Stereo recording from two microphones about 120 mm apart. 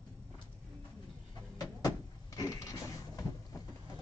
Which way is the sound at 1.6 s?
30° left (ahead or behind).